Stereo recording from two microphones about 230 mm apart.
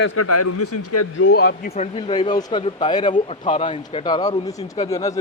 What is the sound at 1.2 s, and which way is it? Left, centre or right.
Speech, left.